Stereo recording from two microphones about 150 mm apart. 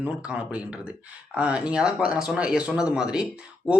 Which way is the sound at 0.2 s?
5° right (ahead or behind).